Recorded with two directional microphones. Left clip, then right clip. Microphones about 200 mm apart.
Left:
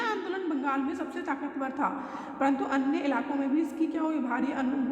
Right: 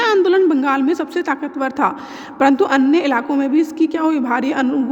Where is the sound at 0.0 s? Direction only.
50° right (ahead or behind).